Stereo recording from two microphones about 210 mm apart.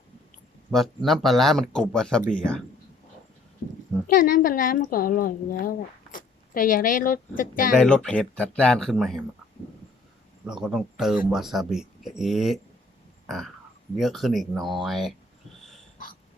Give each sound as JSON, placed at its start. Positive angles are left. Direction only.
{"t": 0.7, "sound": "speech", "side_deg": 0}
{"t": 4.0, "sound": "a woman's voice", "side_deg": 40}
{"t": 7.8, "sound": "speech", "side_deg": 5}
{"t": 10.4, "sound": "speech", "side_deg": 0}
{"t": 13.2, "sound": "a sound", "side_deg": 0}
{"t": 14.0, "sound": "speech", "side_deg": 0}